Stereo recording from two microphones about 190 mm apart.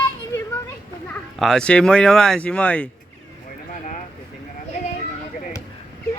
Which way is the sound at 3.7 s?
45° left (ahead or behind).